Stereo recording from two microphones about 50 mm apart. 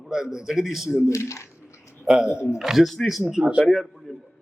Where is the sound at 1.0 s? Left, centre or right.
Left.